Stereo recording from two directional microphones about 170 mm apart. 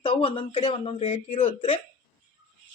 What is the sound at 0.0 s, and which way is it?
Speech, 35° left (ahead or behind).